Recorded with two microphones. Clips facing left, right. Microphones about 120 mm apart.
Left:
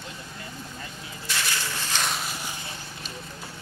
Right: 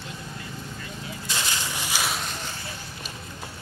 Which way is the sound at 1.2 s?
20° right (ahead or behind).